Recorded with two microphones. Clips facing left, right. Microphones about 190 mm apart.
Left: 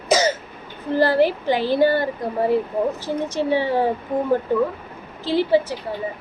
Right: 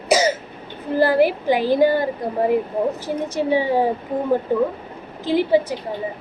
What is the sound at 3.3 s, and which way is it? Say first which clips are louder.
Speech: right 2 dB; 15° right (ahead or behind).